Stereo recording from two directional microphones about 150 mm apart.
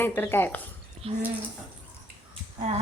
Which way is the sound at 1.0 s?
40° right (ahead or behind).